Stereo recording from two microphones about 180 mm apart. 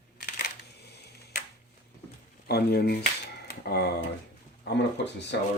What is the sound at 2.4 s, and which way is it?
Speech, 60° left (ahead or behind).